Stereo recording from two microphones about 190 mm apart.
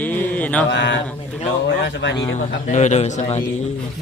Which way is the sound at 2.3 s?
40° left (ahead or behind).